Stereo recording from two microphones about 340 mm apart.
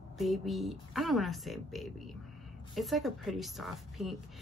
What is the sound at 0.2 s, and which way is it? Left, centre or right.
Speech, centre.